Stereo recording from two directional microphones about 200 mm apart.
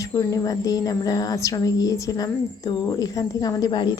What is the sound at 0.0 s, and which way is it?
A woman's voice, 15° left (ahead or behind).